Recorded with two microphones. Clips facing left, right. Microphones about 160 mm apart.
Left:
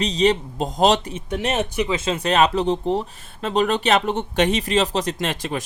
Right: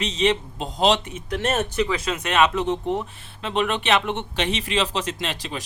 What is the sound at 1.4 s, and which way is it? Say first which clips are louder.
Speech: even; 10° left (ahead or behind).